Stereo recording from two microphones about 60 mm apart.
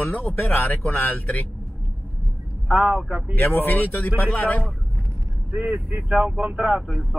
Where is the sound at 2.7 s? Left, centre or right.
Centre.